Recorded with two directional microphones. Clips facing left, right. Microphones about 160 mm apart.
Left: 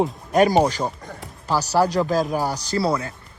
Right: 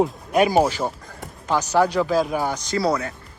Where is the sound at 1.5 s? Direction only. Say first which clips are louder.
Even; 35° left (ahead or behind).